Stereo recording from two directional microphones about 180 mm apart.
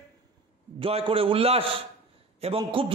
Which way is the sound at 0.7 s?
30° right (ahead or behind).